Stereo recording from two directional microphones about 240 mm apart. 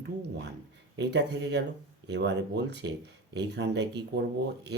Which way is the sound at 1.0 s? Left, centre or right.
Right.